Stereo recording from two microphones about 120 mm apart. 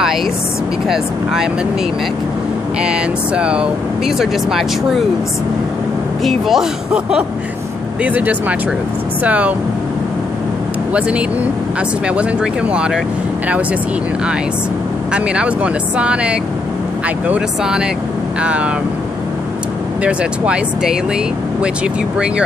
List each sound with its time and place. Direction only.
0.8 s speech: 5° right (ahead or behind)
2.8 s speech: 10° right (ahead or behind)
6.2 s speech: centre (ahead or behind)
10.9 s speech: 10° right (ahead or behind)
15.1 s speech: 10° right (ahead or behind)
20.0 s speech: 10° right (ahead or behind)